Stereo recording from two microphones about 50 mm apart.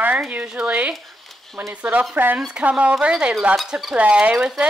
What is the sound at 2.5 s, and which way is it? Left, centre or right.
Speech, right.